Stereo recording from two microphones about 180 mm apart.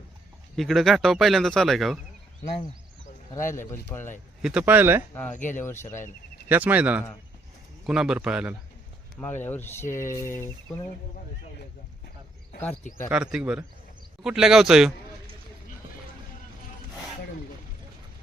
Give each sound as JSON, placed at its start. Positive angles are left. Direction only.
{"t": 0.5, "sound": "speech", "side_deg": 0}
{"t": 3.3, "sound": "speech", "side_deg": 15}
{"t": 4.4, "sound": "speech", "side_deg": -10}
{"t": 5.5, "sound": "speech", "side_deg": 10}
{"t": 6.5, "sound": "speech", "side_deg": -10}
{"t": 9.4, "sound": "speech", "side_deg": 10}
{"t": 13.1, "sound": "speech", "side_deg": -5}